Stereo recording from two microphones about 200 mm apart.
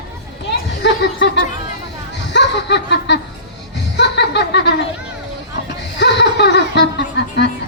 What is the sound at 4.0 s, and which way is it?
Chuckle, 60° left (ahead or behind).